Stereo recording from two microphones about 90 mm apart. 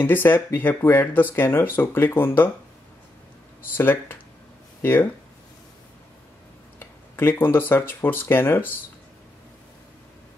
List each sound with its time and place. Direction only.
0.0 s speech: 25° left (ahead or behind)
3.7 s speech: 25° left (ahead or behind)
6.8 s speech: 25° left (ahead or behind)